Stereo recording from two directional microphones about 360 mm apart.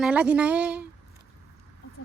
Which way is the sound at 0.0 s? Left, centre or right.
Centre.